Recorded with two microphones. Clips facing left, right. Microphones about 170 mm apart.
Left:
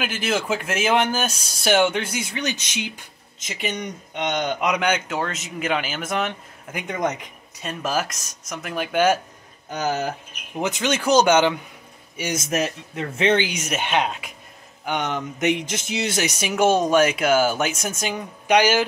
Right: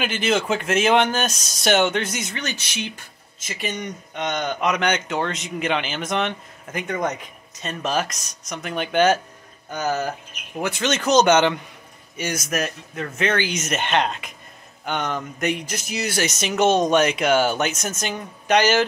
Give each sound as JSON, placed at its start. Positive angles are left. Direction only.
{"t": 0.0, "sound": "speech", "side_deg": 5}
{"t": 10.6, "sound": "speech", "side_deg": 15}
{"t": 12.2, "sound": "speech", "side_deg": 20}
{"t": 13.5, "sound": "speech", "side_deg": 10}
{"t": 14.9, "sound": "speech", "side_deg": 15}